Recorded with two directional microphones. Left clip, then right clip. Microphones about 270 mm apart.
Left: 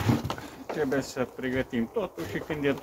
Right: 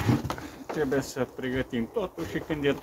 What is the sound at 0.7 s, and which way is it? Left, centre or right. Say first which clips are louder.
Speech: even; centre.